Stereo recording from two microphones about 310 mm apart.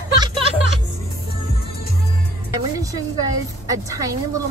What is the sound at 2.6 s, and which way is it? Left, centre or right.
A woman's voice, centre.